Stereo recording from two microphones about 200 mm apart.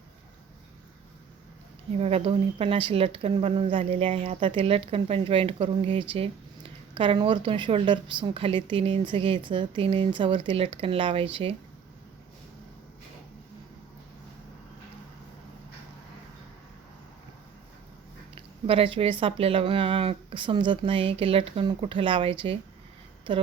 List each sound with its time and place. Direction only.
2.0 s speech: 30° right (ahead or behind)
18.3 s speech: 25° right (ahead or behind)